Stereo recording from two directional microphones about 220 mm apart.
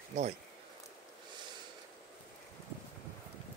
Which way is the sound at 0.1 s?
35° right (ahead or behind).